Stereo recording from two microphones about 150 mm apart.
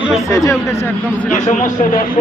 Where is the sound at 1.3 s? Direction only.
55° left (ahead or behind).